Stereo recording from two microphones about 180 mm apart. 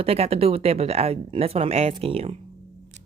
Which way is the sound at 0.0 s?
35° right (ahead or behind).